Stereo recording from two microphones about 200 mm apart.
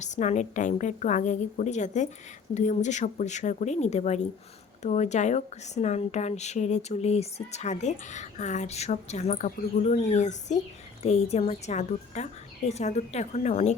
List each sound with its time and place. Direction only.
0.0 s speech: 35° left (ahead or behind)